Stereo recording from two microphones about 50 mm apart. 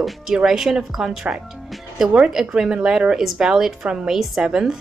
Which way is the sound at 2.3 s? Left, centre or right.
Centre.